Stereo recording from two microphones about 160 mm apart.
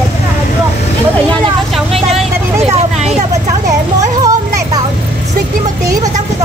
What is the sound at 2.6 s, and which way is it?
Speech, 45° right (ahead or behind).